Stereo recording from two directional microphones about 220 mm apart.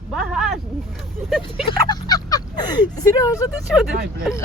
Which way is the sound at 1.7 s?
20° left (ahead or behind).